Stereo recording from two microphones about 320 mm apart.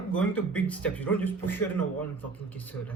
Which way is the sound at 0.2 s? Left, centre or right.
Centre.